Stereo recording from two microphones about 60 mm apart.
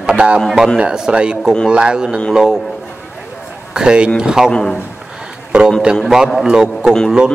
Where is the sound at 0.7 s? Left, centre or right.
Centre.